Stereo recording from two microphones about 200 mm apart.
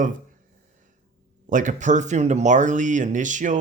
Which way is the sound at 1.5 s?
40° right (ahead or behind).